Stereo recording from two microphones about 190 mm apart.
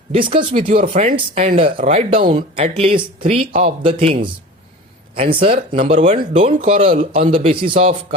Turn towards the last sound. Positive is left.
turn(degrees=-30)  # may be behind; listen again after turning